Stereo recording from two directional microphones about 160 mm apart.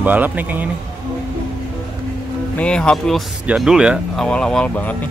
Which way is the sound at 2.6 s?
5° left (ahead or behind).